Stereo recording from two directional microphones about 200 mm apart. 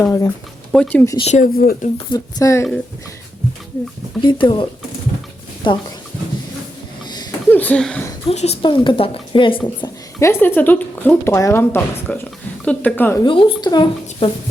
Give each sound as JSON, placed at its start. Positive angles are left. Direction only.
{"t": 0.0, "sound": "speech", "side_deg": 15}
{"t": 0.7, "sound": "speech", "side_deg": 5}
{"t": 1.0, "sound": "a woman's voice", "side_deg": 20}
{"t": 1.3, "sound": "speech", "side_deg": 45}
{"t": 2.0, "sound": "speech", "side_deg": 15}
{"t": 4.2, "sound": "a woman's voice", "side_deg": 25}
{"t": 7.1, "sound": "wheeze", "side_deg": 20}
{"t": 7.5, "sound": "speech", "side_deg": 5}
{"t": 8.3, "sound": "a woman's voice", "side_deg": 30}
{"t": 9.6, "sound": "speech", "side_deg": 15}
{"t": 13.2, "sound": "a woman's voice", "side_deg": 25}